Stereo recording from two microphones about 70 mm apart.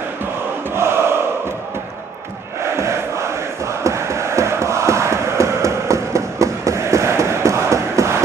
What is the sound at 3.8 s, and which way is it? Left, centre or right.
Crowd, right.